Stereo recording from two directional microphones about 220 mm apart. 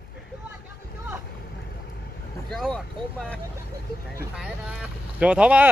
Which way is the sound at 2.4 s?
Centre (ahead or behind).